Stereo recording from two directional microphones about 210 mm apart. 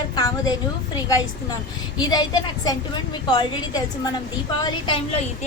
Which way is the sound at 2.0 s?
20° left (ahead or behind).